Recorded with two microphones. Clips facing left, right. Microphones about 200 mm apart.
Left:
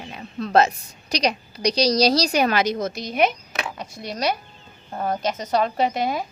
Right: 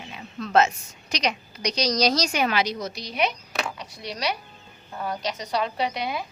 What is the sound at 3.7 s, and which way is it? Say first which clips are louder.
A woman's voice: left 4 dB; 50° left (ahead or behind).